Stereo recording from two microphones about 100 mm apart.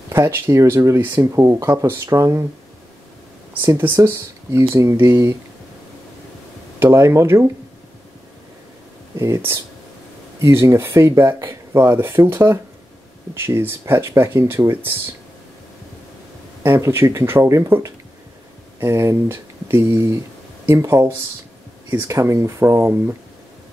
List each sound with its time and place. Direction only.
0.1 s speech: 25° right (ahead or behind)
3.6 s speech: 25° right (ahead or behind)
6.8 s speech: 25° right (ahead or behind)
9.1 s speech: 25° right (ahead or behind)
16.6 s speech: 25° right (ahead or behind)